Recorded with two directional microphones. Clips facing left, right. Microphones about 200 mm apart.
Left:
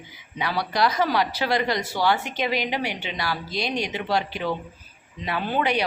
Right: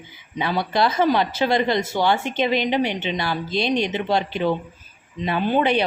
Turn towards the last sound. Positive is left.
turn(degrees=-25)  # may be behind; listen again after turning